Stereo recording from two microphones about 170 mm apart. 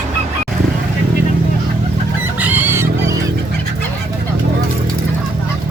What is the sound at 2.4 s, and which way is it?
Fowl, 10° right (ahead or behind).